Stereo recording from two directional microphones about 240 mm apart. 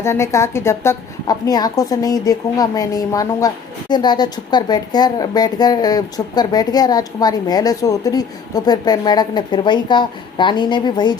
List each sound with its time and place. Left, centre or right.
0.0 s a woman's voice: centre